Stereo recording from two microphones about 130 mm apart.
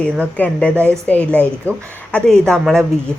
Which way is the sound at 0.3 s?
10° left (ahead or behind).